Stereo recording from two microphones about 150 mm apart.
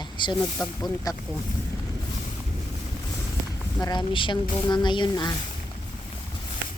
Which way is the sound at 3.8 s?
30° left (ahead or behind).